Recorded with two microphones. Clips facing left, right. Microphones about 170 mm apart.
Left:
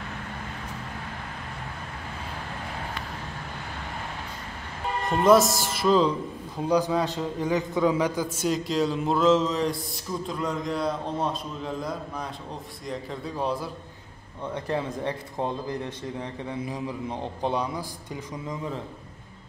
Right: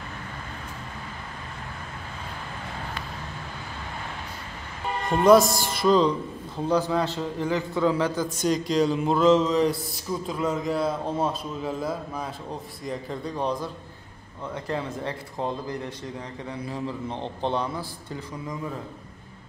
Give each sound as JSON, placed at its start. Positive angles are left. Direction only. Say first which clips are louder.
{"t": 5.1, "sound": "a man's voice", "louder": "right 2 dB", "side_deg": 0}
{"t": 14.5, "sound": "a man's voice", "louder": "left 1 dB", "side_deg": 15}